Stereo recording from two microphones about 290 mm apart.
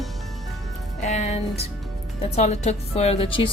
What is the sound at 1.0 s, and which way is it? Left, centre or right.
A woman's voice, left.